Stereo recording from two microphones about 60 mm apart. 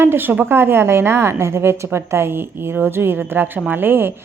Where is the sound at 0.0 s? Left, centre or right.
Right.